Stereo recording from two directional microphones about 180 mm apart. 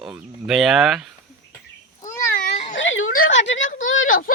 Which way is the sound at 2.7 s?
90° left.